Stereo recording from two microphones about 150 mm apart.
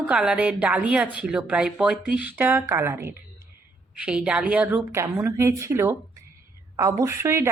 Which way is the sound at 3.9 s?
5° right (ahead or behind).